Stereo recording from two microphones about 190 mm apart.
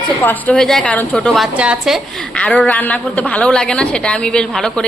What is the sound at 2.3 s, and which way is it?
A woman's voice, 5° left (ahead or behind).